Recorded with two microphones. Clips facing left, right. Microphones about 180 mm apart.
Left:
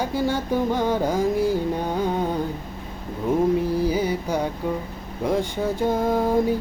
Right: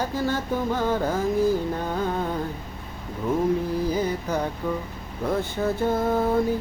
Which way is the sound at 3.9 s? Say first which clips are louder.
Left 2 dB; 10° left (ahead or behind).